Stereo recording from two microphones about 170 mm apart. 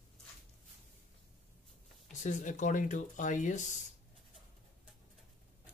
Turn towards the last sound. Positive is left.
turn(degrees=45)  # may be behind; listen again after turning